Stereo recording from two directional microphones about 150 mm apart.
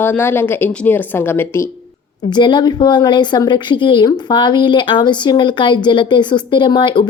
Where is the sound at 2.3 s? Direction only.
30° left (ahead or behind).